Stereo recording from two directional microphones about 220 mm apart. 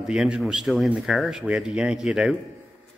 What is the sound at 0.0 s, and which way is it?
Speech, 5° right (ahead or behind).